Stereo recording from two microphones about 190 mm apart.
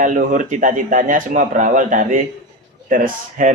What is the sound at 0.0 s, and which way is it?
A man's voice, 40° right (ahead or behind).